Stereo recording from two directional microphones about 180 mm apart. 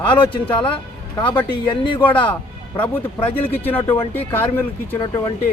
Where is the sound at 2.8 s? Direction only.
10° left (ahead or behind).